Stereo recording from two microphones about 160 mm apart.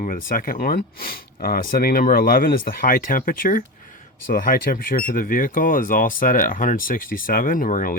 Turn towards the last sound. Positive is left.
turn(degrees=55)  # may be behind; listen again after turning